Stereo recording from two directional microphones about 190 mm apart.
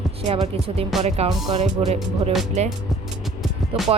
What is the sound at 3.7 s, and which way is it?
Speech, 30° right (ahead or behind).